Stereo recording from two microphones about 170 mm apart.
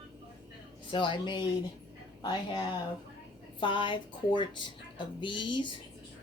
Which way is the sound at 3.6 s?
30° left (ahead or behind).